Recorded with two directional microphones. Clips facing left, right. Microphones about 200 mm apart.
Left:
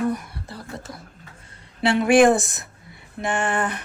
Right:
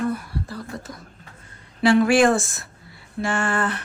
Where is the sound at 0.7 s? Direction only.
25° left (ahead or behind).